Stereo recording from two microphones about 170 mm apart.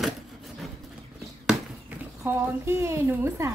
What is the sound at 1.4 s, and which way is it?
Chop, 10° right (ahead or behind).